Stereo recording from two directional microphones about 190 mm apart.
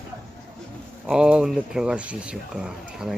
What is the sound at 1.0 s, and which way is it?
Speech, 5° right (ahead or behind).